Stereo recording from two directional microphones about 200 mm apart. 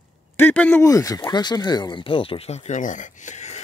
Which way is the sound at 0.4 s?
10° left (ahead or behind).